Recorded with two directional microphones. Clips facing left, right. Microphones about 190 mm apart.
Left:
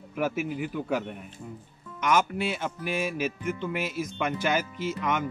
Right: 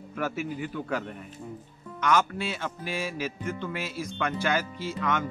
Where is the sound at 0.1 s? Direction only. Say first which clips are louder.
Left 3 dB; 10° left (ahead or behind).